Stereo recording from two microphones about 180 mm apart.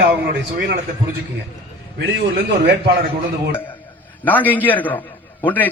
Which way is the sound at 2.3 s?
60° right (ahead or behind).